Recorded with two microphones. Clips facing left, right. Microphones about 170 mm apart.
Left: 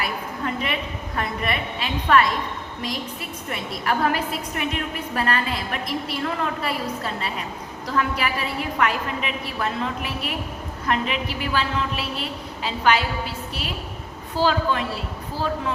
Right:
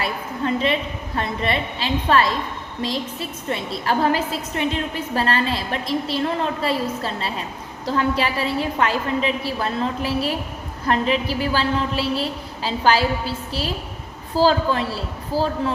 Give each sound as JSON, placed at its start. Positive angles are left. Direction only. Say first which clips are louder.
{"t": 0.0, "sound": "a woman's voice", "louder": "right 3 dB", "side_deg": -30}